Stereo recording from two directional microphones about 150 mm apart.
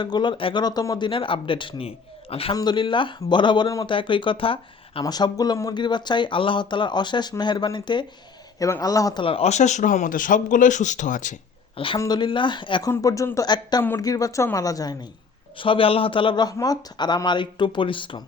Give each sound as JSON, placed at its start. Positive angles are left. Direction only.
{"t": 0.0, "sound": "speech", "side_deg": 30}
{"t": 9.2, "sound": "speech", "side_deg": 40}
{"t": 11.9, "sound": "speech", "side_deg": 25}
{"t": 12.9, "sound": "speech", "side_deg": 20}
{"t": 15.5, "sound": "speech", "side_deg": 35}